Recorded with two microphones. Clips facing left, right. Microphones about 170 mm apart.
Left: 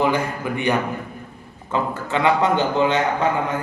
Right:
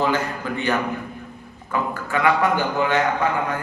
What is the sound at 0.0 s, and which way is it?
A man's voice, 15° left (ahead or behind).